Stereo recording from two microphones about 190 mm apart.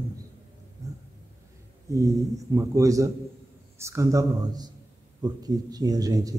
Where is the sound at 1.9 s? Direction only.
15° right (ahead or behind).